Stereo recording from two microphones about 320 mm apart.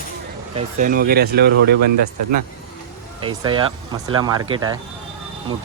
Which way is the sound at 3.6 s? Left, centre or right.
Centre.